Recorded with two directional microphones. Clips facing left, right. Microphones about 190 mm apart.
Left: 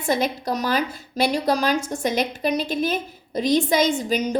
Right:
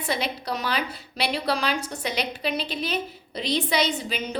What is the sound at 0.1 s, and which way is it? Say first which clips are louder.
A woman's voice: left 6 dB; 45° left (ahead or behind).